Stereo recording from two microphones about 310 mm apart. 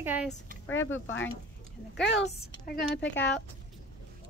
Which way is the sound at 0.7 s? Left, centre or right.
Left.